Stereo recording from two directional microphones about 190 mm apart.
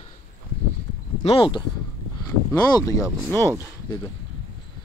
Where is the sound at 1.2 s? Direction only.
25° left (ahead or behind).